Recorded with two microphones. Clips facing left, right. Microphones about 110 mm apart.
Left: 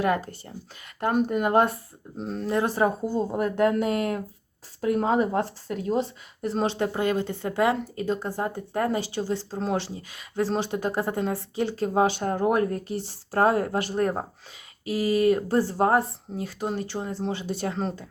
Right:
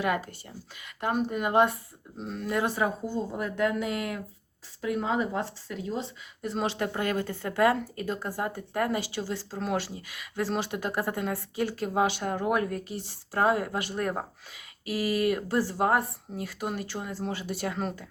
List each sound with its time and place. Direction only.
0.0 s speech: 35° left (ahead or behind)